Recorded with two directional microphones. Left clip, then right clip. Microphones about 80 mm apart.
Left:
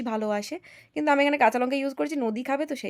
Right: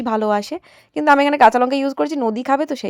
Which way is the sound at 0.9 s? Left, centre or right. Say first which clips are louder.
Right 8 dB; right.